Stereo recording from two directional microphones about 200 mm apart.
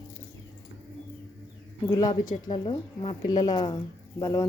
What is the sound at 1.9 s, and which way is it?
Speech, 20° left (ahead or behind).